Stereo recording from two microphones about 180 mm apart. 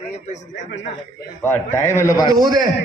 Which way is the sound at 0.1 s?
40° left (ahead or behind).